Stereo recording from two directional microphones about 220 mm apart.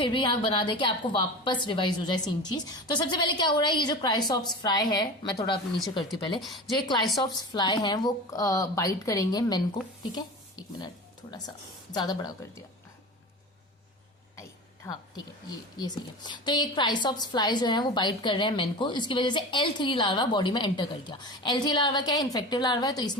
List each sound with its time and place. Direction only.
0.0 s a woman's voice: 20° left (ahead or behind)
10.8 s speech: 20° left (ahead or behind)
15.8 s a woman's voice: 20° left (ahead or behind)